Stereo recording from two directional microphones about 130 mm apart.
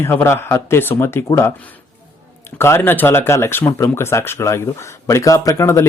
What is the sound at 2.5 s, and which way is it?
Speech, 20° left (ahead or behind).